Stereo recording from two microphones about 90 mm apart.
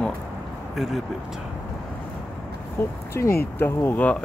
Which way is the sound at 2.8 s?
25° left (ahead or behind).